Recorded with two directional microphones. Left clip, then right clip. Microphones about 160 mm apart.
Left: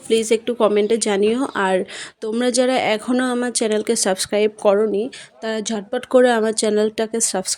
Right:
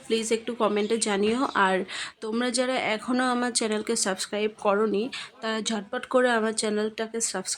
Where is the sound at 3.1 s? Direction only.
20° left (ahead or behind).